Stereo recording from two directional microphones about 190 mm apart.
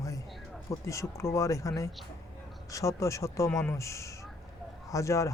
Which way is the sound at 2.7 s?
15° left (ahead or behind).